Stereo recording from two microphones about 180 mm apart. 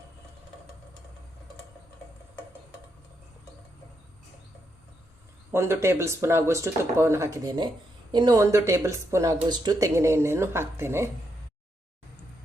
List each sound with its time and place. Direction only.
5.5 s speech: 15° right (ahead or behind)